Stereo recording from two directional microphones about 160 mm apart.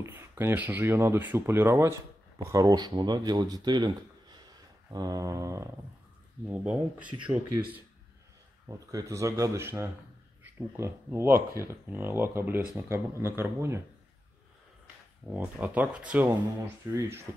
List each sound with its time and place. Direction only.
0.0 s speech: 15° right (ahead or behind)
6.4 s speech: 10° right (ahead or behind)
8.6 s speech: 20° right (ahead or behind)
15.2 s speech: 10° right (ahead or behind)